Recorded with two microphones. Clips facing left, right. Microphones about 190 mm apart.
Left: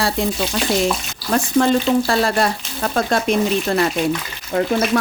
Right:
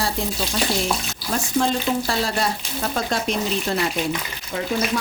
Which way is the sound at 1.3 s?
65° left (ahead or behind).